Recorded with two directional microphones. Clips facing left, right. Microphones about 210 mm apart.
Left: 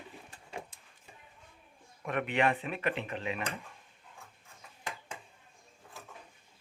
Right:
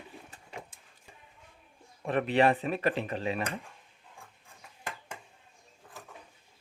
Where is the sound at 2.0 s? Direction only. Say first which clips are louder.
Right 5 dB; 35° right (ahead or behind).